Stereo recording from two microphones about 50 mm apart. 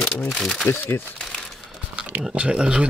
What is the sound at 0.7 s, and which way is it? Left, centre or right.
Speech, left.